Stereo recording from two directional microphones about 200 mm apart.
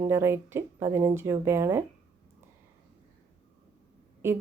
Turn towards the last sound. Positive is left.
turn(degrees=-15)  # may be behind; listen again after turning